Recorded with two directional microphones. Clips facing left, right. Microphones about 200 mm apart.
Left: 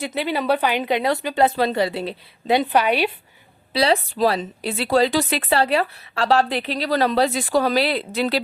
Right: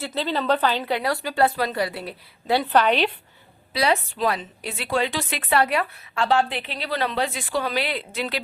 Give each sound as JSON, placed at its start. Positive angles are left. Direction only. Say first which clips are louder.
{"t": 0.0, "sound": "a woman's voice", "louder": "left 2 dB", "side_deg": 15}
{"t": 3.7, "sound": "a woman's voice", "louder": "left 3 dB", "side_deg": 30}